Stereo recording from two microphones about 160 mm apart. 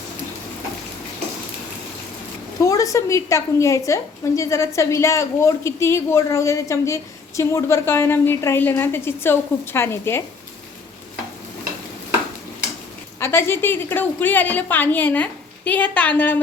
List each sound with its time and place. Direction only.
2.6 s a woman's voice: 20° left (ahead or behind)
13.1 s a woman's voice: 15° left (ahead or behind)